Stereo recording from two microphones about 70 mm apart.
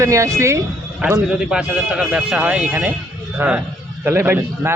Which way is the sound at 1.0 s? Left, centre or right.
Right.